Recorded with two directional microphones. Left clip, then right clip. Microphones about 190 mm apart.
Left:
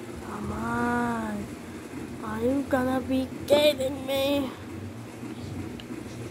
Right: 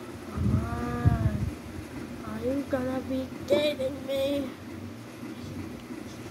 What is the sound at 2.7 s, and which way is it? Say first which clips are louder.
Child singing: left 4 dB; 30° left (ahead or behind).